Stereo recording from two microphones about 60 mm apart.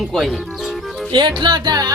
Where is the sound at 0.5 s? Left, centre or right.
Centre.